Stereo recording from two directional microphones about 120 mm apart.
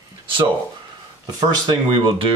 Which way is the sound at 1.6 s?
40° right (ahead or behind).